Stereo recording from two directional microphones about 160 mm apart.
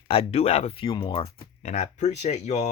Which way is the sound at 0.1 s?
40° left (ahead or behind).